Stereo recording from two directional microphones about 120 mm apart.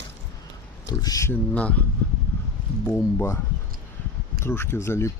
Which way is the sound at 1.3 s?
10° left (ahead or behind).